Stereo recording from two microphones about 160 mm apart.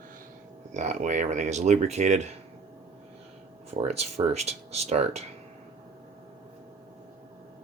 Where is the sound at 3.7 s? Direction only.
40° right (ahead or behind).